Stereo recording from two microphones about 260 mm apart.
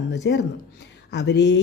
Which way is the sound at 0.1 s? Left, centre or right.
Left.